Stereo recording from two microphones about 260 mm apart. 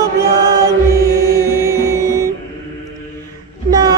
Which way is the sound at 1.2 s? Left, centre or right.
Centre.